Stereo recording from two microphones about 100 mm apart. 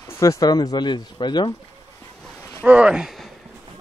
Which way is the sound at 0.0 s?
30° left (ahead or behind).